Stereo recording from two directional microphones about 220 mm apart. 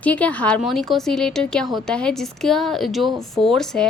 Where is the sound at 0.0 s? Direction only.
5° left (ahead or behind).